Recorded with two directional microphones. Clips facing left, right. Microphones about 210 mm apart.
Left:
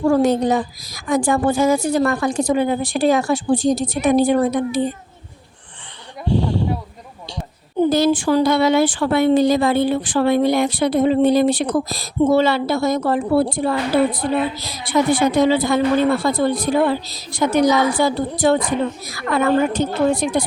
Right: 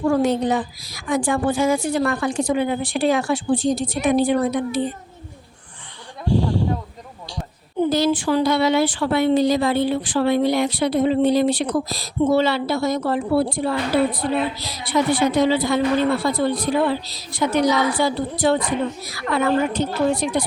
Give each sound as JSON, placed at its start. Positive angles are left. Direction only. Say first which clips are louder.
{"t": 0.1, "sound": "a woman's voice", "louder": "left 3 dB", "side_deg": 40}
{"t": 6.2, "sound": "a sound", "louder": "left 1 dB", "side_deg": 20}
{"t": 7.8, "sound": "a woman's voice", "louder": "left 3 dB", "side_deg": 45}